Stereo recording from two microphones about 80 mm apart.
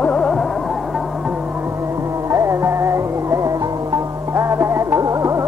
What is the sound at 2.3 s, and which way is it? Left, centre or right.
Music, right.